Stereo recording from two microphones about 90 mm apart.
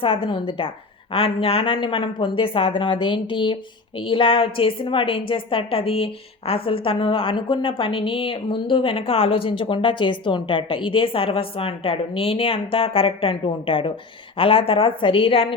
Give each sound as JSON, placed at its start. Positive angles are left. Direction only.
{"t": 0.0, "sound": "a woman's voice", "side_deg": 75}
{"t": 1.1, "sound": "a woman's voice", "side_deg": 90}
{"t": 14.3, "sound": "a woman's voice", "side_deg": 80}